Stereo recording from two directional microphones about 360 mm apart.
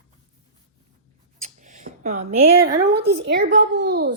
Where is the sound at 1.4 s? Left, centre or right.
Right.